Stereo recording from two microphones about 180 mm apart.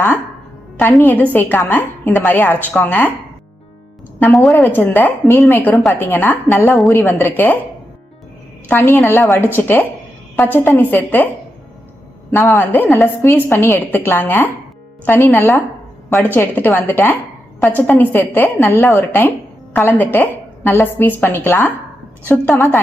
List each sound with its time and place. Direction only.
0.8 s a woman's voice: 10° left (ahead or behind)
4.2 s a woman's voice: 15° left (ahead or behind)
8.6 s a woman's voice: 10° left (ahead or behind)
12.3 s a woman's voice: 15° left (ahead or behind)